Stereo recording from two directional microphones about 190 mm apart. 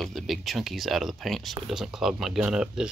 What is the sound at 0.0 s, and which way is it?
Speech, centre (ahead or behind).